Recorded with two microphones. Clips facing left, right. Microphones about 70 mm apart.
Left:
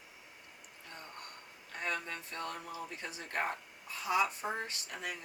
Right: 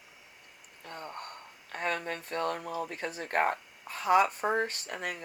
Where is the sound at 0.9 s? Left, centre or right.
Right.